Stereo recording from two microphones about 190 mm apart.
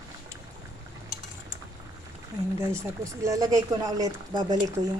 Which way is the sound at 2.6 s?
15° right (ahead or behind).